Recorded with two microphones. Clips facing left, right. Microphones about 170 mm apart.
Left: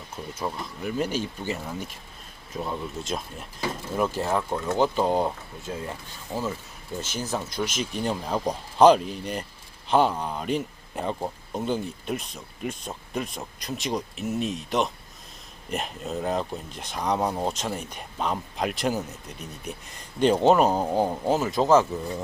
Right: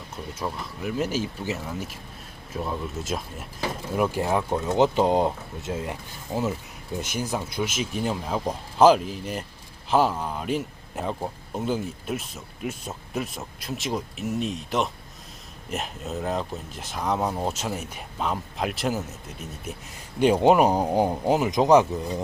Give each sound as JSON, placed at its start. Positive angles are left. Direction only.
{"t": 0.3, "sound": "speech", "side_deg": 0}